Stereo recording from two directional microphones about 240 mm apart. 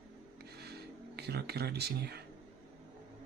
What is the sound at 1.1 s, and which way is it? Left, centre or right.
Speech, right.